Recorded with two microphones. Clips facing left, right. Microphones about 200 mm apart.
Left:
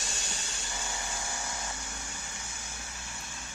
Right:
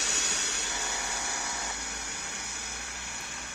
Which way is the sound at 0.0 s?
70° right (ahead or behind).